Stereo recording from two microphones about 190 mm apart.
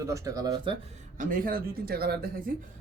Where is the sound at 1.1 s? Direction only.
45° right (ahead or behind).